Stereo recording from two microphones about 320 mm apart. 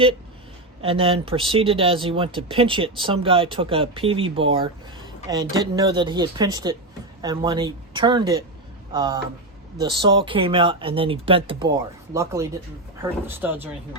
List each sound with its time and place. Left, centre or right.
0.8 s speech: centre